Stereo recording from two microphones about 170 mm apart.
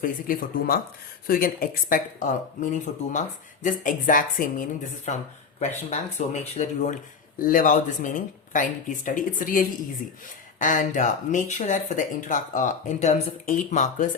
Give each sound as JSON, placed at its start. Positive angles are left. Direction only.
{"t": 0.0, "sound": "speech", "side_deg": 55}